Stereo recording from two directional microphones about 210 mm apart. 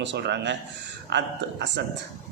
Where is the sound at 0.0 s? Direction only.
55° right (ahead or behind).